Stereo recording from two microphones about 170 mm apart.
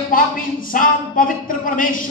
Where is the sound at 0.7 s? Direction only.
50° left (ahead or behind).